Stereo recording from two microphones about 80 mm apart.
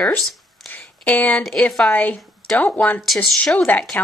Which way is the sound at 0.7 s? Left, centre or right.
Left.